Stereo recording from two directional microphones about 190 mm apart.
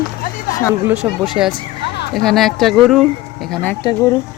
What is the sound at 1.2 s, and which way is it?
Speech, centre (ahead or behind).